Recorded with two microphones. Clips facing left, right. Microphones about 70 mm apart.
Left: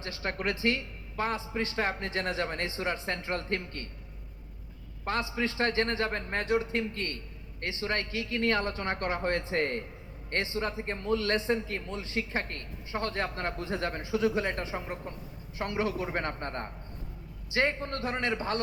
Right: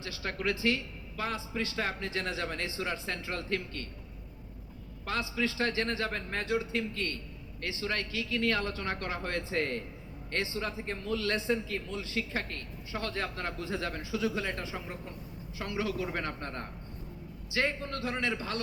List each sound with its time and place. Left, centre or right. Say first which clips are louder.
0.0 s a man's voice: left 1 dB; left
5.0 s a man's voice: left 2 dB; left